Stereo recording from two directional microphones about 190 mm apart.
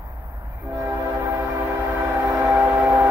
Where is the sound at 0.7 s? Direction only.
15° right (ahead or behind).